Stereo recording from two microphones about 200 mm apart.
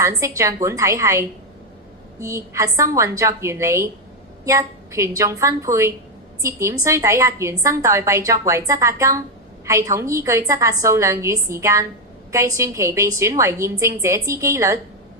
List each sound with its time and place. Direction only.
0.0 s a woman's voice: 15° right (ahead or behind)